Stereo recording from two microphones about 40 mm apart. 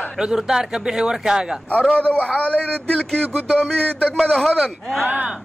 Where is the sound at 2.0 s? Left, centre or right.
Left.